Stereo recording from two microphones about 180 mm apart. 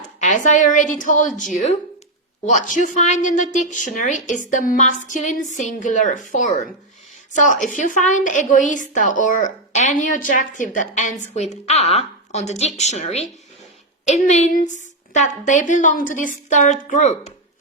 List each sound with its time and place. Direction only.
0.2 s a woman's voice: 45° left (ahead or behind)
2.5 s a woman's voice: 45° left (ahead or behind)